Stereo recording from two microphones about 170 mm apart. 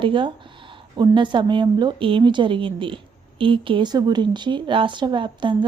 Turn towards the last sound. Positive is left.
turn(degrees=-30)  # may be behind; listen again after turning